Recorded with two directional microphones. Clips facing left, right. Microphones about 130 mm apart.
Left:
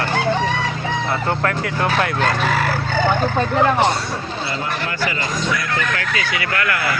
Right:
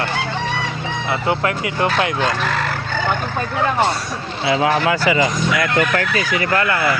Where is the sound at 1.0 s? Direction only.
5° right (ahead or behind).